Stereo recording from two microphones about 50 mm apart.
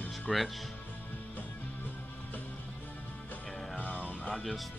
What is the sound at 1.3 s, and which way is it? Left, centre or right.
Music, left.